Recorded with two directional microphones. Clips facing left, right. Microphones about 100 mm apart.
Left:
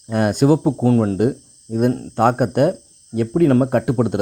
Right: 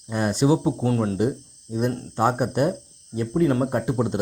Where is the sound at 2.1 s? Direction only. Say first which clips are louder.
Left 4 dB; 55° left (ahead or behind).